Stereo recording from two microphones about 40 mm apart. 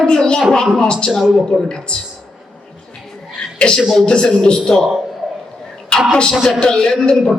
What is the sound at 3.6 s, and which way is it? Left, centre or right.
A man's voice, left.